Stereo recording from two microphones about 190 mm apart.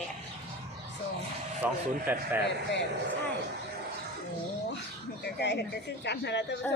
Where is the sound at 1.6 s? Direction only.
10° right (ahead or behind).